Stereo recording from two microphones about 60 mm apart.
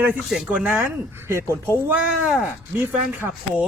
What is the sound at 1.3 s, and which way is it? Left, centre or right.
Speech, right.